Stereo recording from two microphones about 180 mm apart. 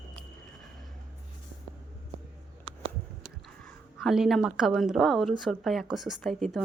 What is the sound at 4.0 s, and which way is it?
A woman's voice, centre (ahead or behind).